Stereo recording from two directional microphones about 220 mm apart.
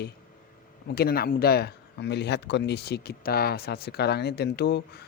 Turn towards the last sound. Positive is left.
turn(degrees=50)  # may be behind; listen again after turning